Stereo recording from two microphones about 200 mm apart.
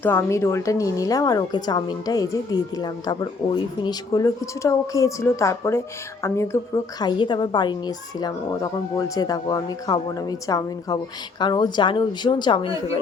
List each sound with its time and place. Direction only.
0.0 s a woman's voice: 10° left (ahead or behind)